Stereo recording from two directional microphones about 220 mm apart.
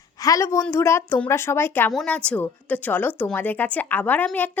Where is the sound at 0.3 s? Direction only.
15° left (ahead or behind).